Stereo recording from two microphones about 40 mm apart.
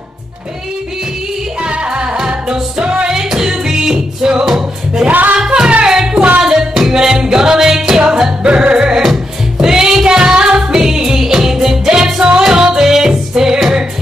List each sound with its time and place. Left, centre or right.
1.6 s music: right
5.0 s music: right
5.4 s music: right
8.5 s music: right